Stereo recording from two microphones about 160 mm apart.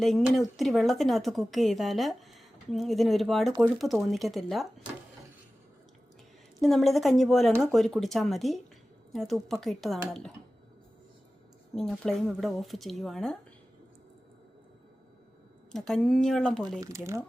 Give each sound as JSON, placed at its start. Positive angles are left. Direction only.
{"t": 0.0, "sound": "a woman's voice", "side_deg": 0}
{"t": 6.6, "sound": "a woman's voice", "side_deg": 0}
{"t": 11.7, "sound": "a woman's voice", "side_deg": 0}
{"t": 15.7, "sound": "a woman's voice", "side_deg": 5}
{"t": 16.8, "sound": "speech", "side_deg": -20}